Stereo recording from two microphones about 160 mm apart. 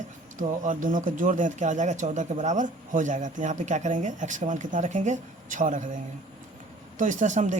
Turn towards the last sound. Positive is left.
turn(degrees=-50)  # may be behind; listen again after turning